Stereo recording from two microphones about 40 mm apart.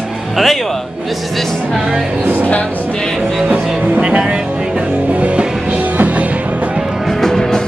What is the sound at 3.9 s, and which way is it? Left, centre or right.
Speech, right.